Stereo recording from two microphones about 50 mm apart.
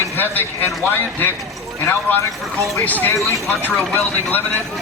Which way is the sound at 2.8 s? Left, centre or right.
Left.